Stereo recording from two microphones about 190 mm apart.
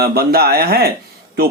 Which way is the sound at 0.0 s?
55° right (ahead or behind).